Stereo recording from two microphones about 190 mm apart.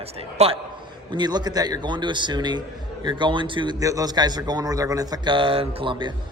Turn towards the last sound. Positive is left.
turn(degrees=-25)  # may be behind; listen again after turning